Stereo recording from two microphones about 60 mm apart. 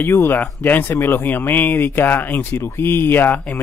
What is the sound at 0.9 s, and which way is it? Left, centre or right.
Speech, left.